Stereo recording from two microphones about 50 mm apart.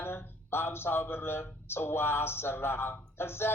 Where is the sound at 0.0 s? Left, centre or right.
Left.